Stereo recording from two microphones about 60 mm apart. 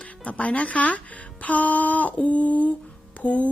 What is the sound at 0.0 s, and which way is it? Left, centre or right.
Speech, left.